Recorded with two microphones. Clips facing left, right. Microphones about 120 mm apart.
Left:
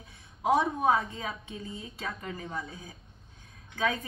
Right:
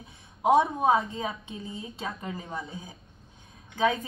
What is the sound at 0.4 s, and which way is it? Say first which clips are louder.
A woman's voice: right 4 dB; 25° right (ahead or behind).